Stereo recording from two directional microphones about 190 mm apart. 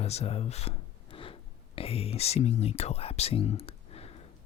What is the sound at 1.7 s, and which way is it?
Speech, 30° left (ahead or behind).